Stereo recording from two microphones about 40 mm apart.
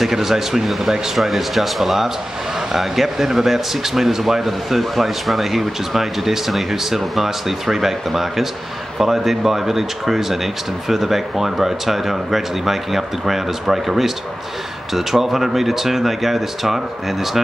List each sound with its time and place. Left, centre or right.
0.0 s speech: centre